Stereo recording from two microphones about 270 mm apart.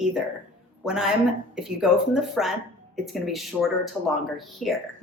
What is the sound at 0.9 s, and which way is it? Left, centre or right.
A woman's voice, centre.